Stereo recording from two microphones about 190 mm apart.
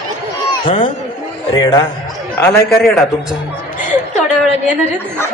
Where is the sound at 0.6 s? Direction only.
30° left (ahead or behind).